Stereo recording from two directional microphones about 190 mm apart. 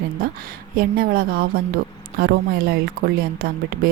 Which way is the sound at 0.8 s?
50° right (ahead or behind).